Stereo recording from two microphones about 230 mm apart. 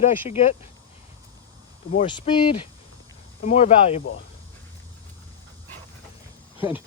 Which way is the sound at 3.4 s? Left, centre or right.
Left.